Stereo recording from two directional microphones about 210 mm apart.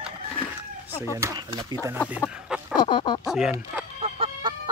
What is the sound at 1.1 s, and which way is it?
Speech, 15° right (ahead or behind).